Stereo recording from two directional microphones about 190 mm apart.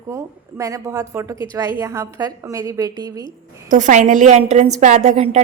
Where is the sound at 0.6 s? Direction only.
15° right (ahead or behind).